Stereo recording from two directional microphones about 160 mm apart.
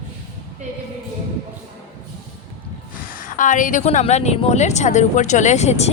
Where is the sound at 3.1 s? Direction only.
55° left (ahead or behind).